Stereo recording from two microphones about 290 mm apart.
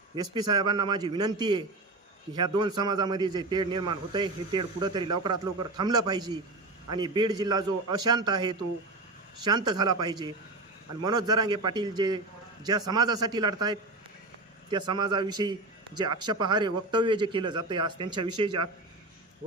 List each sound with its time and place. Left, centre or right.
0.2 s a man's voice: centre